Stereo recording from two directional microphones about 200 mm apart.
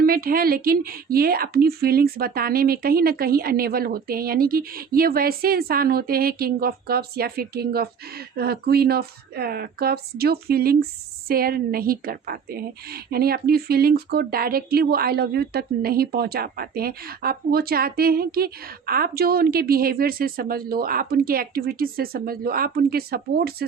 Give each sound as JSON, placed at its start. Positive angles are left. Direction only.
{"t": 0.0, "sound": "a woman's voice", "side_deg": -50}